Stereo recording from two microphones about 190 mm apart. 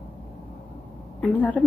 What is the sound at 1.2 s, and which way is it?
Speech, 10° left (ahead or behind).